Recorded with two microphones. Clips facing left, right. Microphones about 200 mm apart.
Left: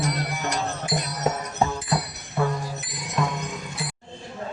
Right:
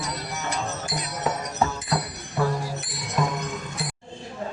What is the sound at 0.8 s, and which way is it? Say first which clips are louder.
Music: left 3 dB; 50° left (ahead or behind).